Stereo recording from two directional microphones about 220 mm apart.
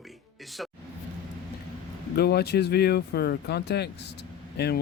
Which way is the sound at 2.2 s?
45° left (ahead or behind).